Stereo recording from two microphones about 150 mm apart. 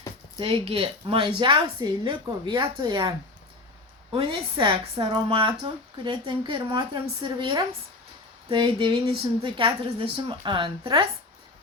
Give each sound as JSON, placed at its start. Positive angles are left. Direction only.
{"t": 0.3, "sound": "speech", "side_deg": -35}